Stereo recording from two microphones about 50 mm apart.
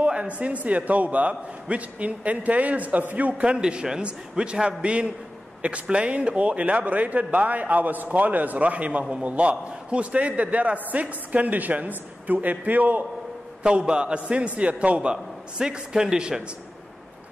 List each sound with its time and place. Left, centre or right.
0.0 s a sound: right
0.4 s a man's voice: right
3.4 s a man's voice: centre; by 13.0 s right
13.6 s a man's voice: right